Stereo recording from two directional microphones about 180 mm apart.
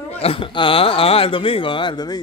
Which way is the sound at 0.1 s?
35° left (ahead or behind).